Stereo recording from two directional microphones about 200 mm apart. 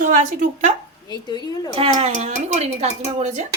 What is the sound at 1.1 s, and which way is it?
Speech, 20° left (ahead or behind).